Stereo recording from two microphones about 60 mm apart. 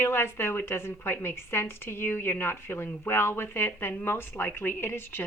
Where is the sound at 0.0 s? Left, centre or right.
Left.